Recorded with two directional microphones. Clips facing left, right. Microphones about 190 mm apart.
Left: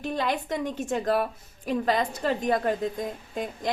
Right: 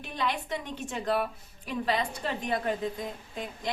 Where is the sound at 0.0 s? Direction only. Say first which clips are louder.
Left 5 dB; 45° left (ahead or behind).